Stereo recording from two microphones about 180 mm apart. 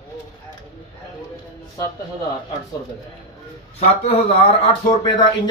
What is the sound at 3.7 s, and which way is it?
A man's voice, 35° left (ahead or behind).